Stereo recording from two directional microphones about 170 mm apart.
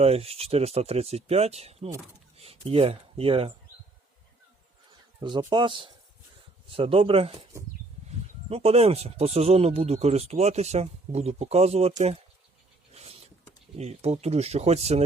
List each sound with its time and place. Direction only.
0.0 s speech: 35° right (ahead or behind)
5.2 s a man's voice: 30° right (ahead or behind)
8.4 s speech: 35° right (ahead or behind)
12.9 s a sound: 35° right (ahead or behind)
13.7 s speech: 40° right (ahead or behind)